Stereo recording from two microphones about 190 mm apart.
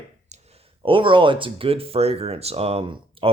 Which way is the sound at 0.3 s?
35° right (ahead or behind).